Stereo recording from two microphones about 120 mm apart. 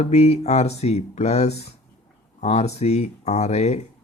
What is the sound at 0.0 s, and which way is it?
Speech, 65° left (ahead or behind).